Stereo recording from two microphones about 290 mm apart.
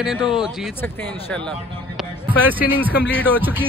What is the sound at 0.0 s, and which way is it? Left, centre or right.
Speech, centre.